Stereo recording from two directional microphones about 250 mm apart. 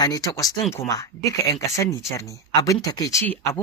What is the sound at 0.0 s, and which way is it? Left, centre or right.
Speech, centre.